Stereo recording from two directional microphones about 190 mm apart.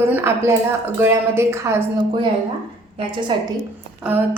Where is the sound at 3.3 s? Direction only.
25° right (ahead or behind).